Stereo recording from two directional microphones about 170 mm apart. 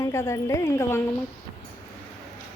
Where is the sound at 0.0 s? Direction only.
15° left (ahead or behind).